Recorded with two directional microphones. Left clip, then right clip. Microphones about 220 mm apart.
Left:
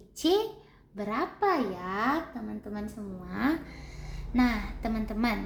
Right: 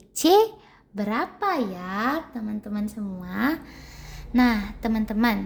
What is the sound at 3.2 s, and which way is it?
Speech, 45° right (ahead or behind).